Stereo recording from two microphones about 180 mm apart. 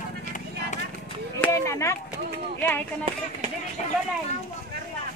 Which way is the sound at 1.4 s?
15° left (ahead or behind).